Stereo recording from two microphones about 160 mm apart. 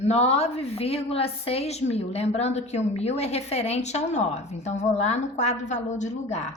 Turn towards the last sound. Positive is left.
turn(degrees=45)  # may be behind; listen again after turning